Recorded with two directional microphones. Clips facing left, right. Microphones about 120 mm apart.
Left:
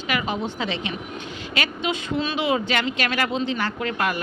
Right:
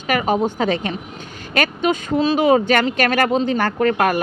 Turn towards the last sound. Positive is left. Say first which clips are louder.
# right 8 dB
turn(degrees=-45)  # may be behind; listen again after turning